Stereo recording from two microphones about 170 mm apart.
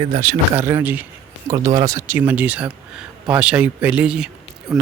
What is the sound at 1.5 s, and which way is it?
Speech, 25° right (ahead or behind).